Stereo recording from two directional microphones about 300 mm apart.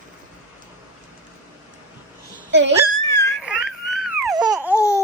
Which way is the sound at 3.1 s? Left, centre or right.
Centre.